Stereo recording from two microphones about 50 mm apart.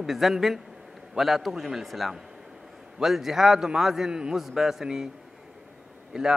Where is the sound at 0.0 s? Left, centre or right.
Centre.